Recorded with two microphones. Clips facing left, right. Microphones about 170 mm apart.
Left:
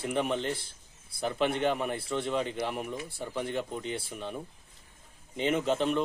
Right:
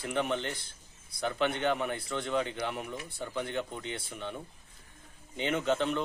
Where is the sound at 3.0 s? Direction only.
30° left (ahead or behind).